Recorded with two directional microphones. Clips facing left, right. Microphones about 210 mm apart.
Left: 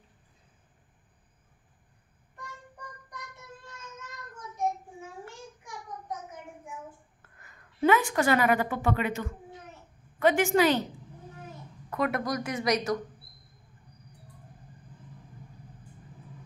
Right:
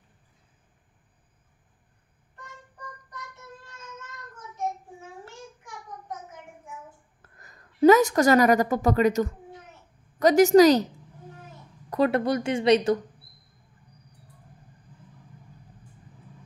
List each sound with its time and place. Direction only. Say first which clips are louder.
5.2 s child singing: right 1 dB; 15° left (ahead or behind)
7.2 s a woman's voice: right 3 dB; 40° right (ahead or behind)
11.9 s a woman's voice: right 6 dB; 30° right (ahead or behind)